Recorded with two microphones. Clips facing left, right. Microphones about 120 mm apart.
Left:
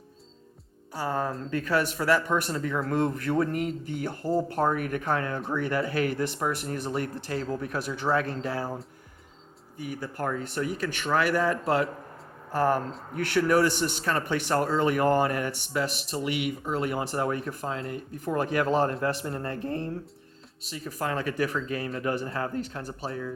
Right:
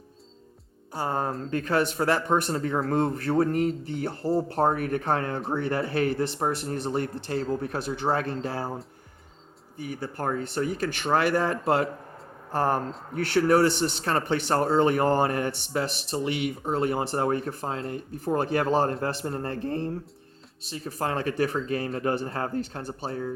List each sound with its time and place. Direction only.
0.9 s speech: 35° right (ahead or behind)
9.7 s speech: 35° right (ahead or behind)
20.7 s speech: 30° right (ahead or behind)